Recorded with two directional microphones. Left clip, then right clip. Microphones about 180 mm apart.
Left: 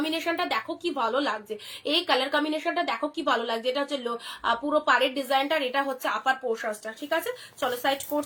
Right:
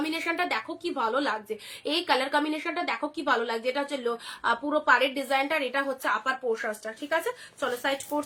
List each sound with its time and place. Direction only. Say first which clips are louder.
0.0 s a woman's voice: left 1 dB; 15° right (ahead or behind)